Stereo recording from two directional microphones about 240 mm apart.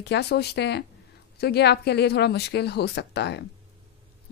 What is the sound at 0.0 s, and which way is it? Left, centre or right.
A woman's voice, left.